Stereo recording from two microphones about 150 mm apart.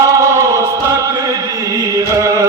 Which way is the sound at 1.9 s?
20° right (ahead or behind).